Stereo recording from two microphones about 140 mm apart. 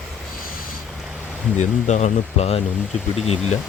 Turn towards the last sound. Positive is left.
turn(degrees=45)  # may be behind; listen again after turning